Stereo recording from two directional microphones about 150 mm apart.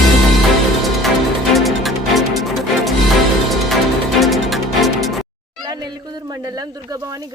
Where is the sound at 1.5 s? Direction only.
Centre (ahead or behind).